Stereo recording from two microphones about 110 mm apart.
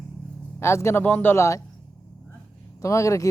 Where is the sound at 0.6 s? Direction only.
25° left (ahead or behind).